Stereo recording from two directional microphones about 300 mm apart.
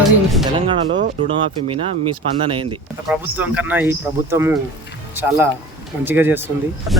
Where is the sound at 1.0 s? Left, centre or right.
Centre.